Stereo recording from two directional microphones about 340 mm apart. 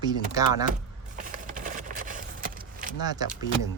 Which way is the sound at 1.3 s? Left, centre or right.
Right.